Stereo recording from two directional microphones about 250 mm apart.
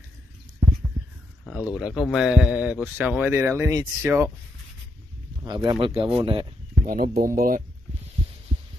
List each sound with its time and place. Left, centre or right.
0.6 s a sound: centre
1.4 s speech: centre
5.7 s speech: centre
6.9 s speech: right